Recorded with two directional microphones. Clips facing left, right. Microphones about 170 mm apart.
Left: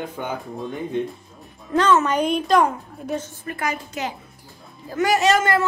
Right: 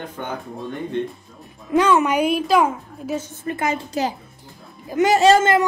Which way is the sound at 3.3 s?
25° right (ahead or behind).